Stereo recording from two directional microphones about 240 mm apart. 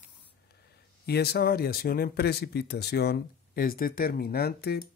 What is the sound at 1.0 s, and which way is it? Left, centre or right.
Speech, left.